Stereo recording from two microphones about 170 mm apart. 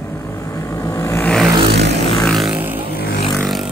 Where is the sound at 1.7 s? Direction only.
85° right.